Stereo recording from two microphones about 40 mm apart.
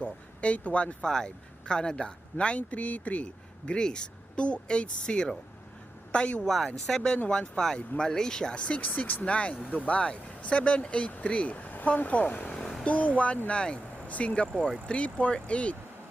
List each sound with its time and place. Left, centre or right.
0.0 s speech: left
1.0 s speech: centre
2.6 s speech: left
3.7 s speech: left
6.4 s speech: centre
7.3 s speech: left
8.5 s speech: left
10.0 s speech: left